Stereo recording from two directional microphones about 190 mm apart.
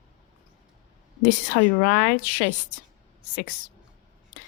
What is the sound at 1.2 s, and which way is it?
Speech, 50° left (ahead or behind).